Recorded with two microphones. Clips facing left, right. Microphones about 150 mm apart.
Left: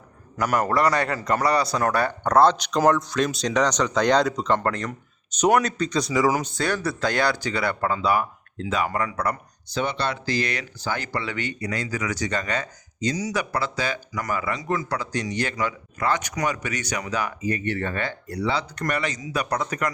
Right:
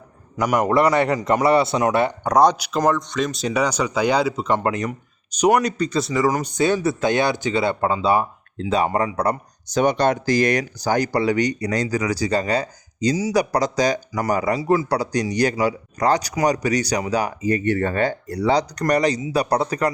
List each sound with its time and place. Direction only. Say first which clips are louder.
0.3 s a man's voice: right 4 dB; 15° right (ahead or behind)
5.4 s speech: right 3 dB; 5° right (ahead or behind)
6.4 s speech: right 6 dB; 15° right (ahead or behind); by 19.9 s 35° right (ahead or behind)